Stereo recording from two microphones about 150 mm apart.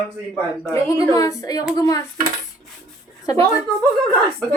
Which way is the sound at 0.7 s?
20° left (ahead or behind).